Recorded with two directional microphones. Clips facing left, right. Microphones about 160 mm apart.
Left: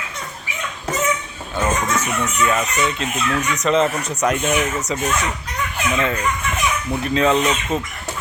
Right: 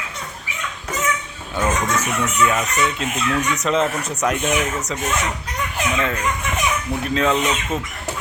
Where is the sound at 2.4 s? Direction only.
Centre (ahead or behind).